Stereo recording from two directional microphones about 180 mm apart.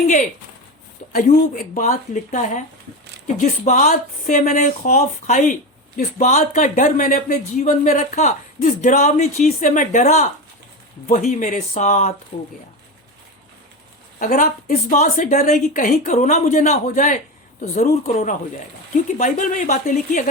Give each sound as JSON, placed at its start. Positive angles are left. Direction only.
{"t": 1.1, "sound": "a woman's voice", "side_deg": 50}
{"t": 14.2, "sound": "a woman's voice", "side_deg": 45}